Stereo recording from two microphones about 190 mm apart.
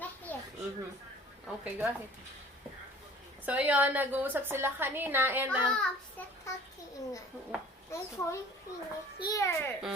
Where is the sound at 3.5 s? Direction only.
10° right (ahead or behind).